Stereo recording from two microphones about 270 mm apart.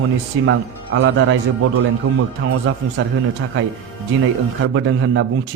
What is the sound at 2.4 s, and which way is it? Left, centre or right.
Speech, right.